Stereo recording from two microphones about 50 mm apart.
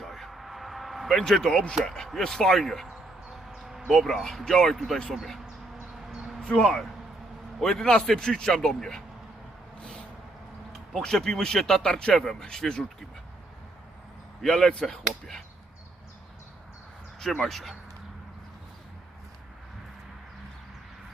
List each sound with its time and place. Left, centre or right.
0.0 s a sound: centre
2.0 s speech: centre
3.6 s a sound: centre
3.8 s speech: centre
5.7 s a sound: centre
6.4 s speech: centre
9.8 s vehicle: centre
10.7 s speech: centre
14.4 s speech: centre
17.2 s speech: centre
17.4 s speech: centre